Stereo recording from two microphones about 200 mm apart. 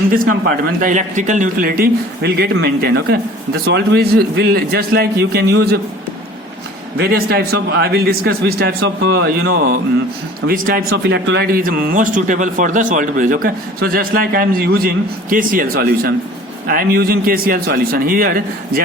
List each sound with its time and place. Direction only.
0.1 s speech: 45° right (ahead or behind)
6.9 s speech: 55° right (ahead or behind)
10.8 s speech: 55° right (ahead or behind)